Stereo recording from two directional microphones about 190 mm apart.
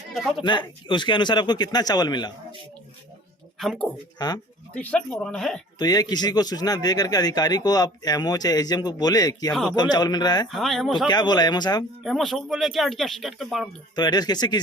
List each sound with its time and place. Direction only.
0.1 s speech: centre (ahead or behind)
0.4 s speech: 25° left (ahead or behind)
3.6 s speech: 5° left (ahead or behind)
4.2 s speech: 20° left (ahead or behind)
4.7 s speech: 5° left (ahead or behind)
5.8 s speech: 20° left (ahead or behind)
9.5 s speech: centre (ahead or behind)
9.7 s speech: 20° left (ahead or behind)
10.5 s speech: centre (ahead or behind)
11.1 s speech: 20° left (ahead or behind)
12.0 s speech: centre (ahead or behind)
13.9 s speech: 20° left (ahead or behind)